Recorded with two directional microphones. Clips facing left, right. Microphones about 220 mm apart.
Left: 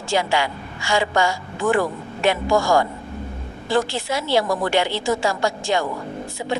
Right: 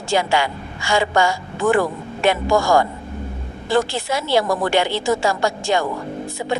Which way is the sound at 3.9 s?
50° right (ahead or behind).